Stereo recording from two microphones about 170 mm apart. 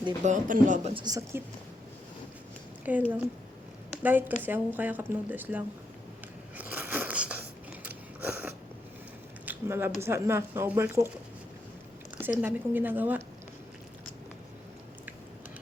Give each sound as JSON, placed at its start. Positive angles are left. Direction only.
{"t": 0.3, "sound": "speech", "side_deg": -50}
{"t": 0.9, "sound": "a woman's voice", "side_deg": -20}
{"t": 2.8, "sound": "a woman's voice", "side_deg": -10}
{"t": 6.6, "sound": "biting", "side_deg": -10}
{"t": 9.5, "sound": "a woman's voice", "side_deg": -15}
{"t": 12.2, "sound": "a woman's voice", "side_deg": -10}